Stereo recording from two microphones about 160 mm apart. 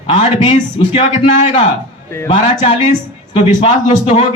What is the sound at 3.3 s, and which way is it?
Speech, 35° left (ahead or behind).